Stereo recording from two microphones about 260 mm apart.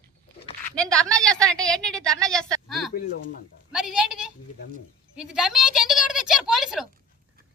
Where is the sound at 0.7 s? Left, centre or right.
Centre.